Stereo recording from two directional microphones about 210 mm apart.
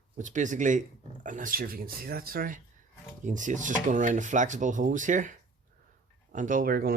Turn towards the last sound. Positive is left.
turn(degrees=-45)  # may be behind; listen again after turning